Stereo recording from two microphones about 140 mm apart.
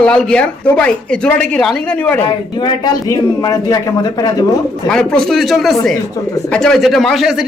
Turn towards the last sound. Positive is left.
turn(degrees=-5)  # may be behind; listen again after turning